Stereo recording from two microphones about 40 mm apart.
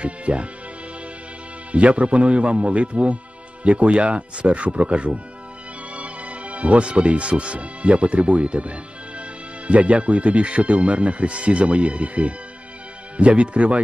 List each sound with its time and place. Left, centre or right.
0.0 s speech: right
1.7 s speech: right